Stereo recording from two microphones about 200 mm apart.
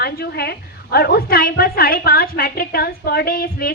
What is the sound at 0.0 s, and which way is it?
A woman's voice, 50° left (ahead or behind).